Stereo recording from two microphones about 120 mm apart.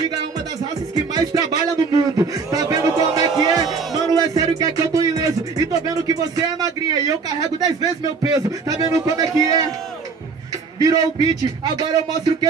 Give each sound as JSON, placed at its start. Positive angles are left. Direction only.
{"t": 0.9, "sound": "a sound", "side_deg": -30}
{"t": 3.6, "sound": "music", "side_deg": 0}
{"t": 4.1, "sound": "music", "side_deg": -30}
{"t": 7.6, "sound": "a man's voice", "side_deg": -30}
{"t": 10.8, "sound": "music", "side_deg": -30}